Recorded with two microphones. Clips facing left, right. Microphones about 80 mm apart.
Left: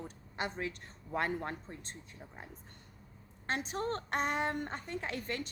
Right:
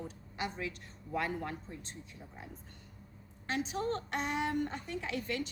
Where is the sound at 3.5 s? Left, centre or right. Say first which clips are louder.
Right 1 dB; left.